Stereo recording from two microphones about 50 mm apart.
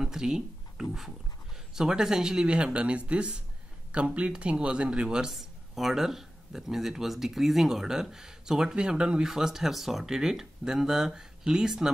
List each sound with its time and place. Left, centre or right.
0.0 s a sound: centre
1.7 s speech: centre
5.3 s speech: centre; by 9.2 s right
9.2 s speech: centre